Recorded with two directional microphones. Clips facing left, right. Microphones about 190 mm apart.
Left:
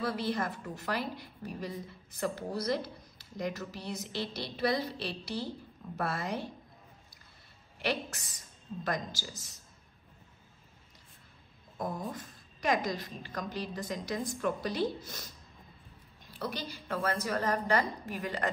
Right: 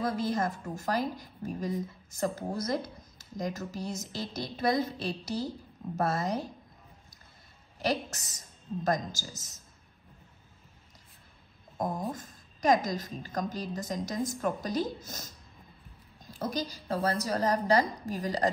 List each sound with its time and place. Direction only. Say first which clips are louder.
0.0 s a woman's voice: right 3 dB; 45° right (ahead or behind)
7.8 s a woman's voice: right 3 dB; 40° right (ahead or behind)
11.8 s a woman's voice: right 4 dB; 45° right (ahead or behind)